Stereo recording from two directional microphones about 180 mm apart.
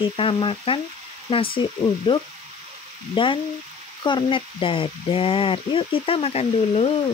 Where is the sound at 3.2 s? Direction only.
30° left (ahead or behind).